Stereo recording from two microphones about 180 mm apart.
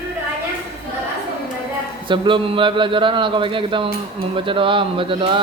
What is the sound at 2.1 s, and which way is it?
A man's voice, 25° right (ahead or behind).